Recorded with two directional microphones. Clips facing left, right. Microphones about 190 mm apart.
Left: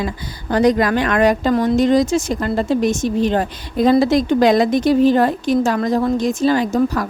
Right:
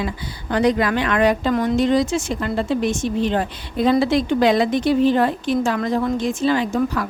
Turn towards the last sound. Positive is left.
turn(degrees=40)  # may be behind; listen again after turning